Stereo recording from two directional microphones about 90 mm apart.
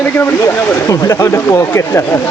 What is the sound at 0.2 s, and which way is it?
Speech, 35° left (ahead or behind).